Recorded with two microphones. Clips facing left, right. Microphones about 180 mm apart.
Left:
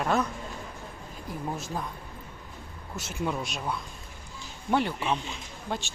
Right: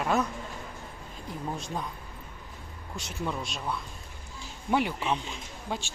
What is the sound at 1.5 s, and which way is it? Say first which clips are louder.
Speech: right 1 dB; 5° left (ahead or behind).